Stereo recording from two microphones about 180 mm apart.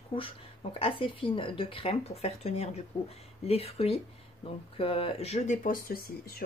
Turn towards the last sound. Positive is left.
turn(degrees=55)  # may be behind; listen again after turning